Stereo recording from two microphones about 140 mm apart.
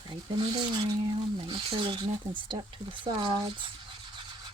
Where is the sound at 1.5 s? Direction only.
35° right (ahead or behind).